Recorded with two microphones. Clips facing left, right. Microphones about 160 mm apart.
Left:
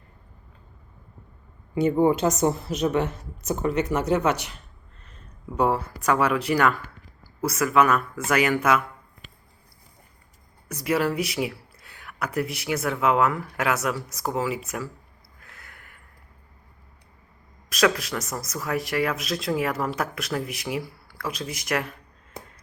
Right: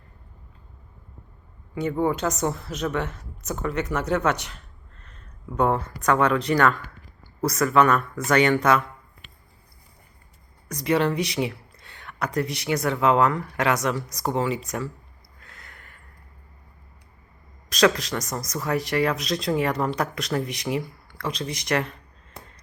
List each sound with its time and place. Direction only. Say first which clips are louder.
1.7 s a woman's voice: left 4 dB; 15° left (ahead or behind)
10.7 s speech: right 2 dB; 5° left (ahead or behind)
15.4 s a sound: right 1 dB; 5° left (ahead or behind)
17.7 s speech: right 2 dB; 5° left (ahead or behind)